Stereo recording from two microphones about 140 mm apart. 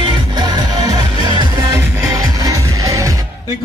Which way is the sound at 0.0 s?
35° right (ahead or behind).